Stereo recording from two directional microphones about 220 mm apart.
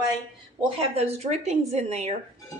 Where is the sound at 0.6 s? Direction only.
25° right (ahead or behind).